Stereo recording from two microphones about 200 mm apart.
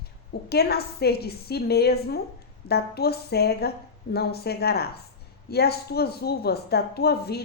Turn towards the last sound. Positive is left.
turn(degrees=50)  # may be behind; listen again after turning